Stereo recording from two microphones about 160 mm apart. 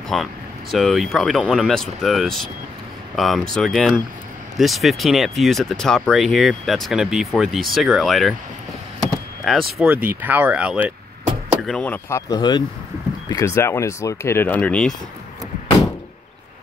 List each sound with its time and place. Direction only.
0.1 s speech: centre (ahead or behind)
9.4 s speech: centre (ahead or behind)
11.6 s speech: 5° left (ahead or behind)
12.3 s speech: 25° left (ahead or behind); by 15.0 s 5° left (ahead or behind)